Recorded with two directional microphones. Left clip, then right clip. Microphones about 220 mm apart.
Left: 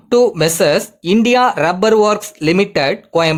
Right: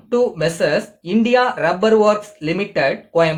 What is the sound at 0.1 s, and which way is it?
Speech, 45° left (ahead or behind).